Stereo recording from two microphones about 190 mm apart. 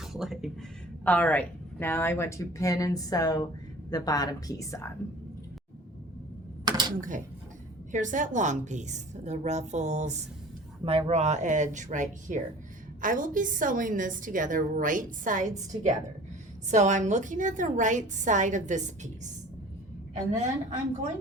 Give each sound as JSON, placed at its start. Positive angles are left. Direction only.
{"t": 0.0, "sound": "a woman's voice", "side_deg": 0}
{"t": 6.7, "sound": "typing", "side_deg": -20}
{"t": 7.9, "sound": "a woman's voice", "side_deg": -40}